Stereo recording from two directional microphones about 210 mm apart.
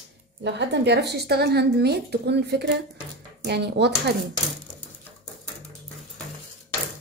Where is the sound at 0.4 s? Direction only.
55° right (ahead or behind).